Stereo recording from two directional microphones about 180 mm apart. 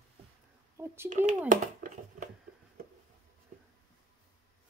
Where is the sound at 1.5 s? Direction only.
45° right (ahead or behind).